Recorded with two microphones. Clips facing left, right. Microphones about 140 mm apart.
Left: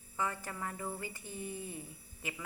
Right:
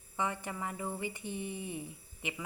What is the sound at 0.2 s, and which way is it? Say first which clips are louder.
A woman's voice: right 2 dB; 20° right (ahead or behind).